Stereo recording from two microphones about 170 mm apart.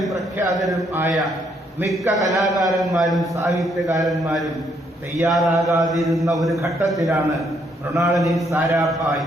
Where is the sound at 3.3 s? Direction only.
20° right (ahead or behind).